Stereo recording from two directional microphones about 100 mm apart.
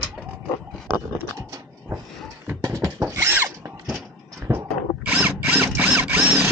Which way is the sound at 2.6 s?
35° right (ahead or behind).